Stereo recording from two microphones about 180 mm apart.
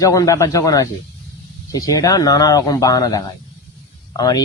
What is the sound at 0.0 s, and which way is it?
Speech, 20° left (ahead or behind).